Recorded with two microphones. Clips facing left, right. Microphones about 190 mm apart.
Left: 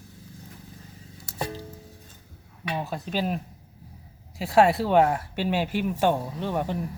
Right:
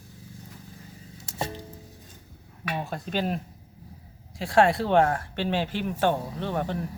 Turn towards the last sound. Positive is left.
turn(degrees=10)  # may be behind; listen again after turning